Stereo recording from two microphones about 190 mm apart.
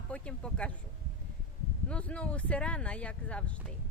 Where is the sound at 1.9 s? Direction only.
5° left (ahead or behind).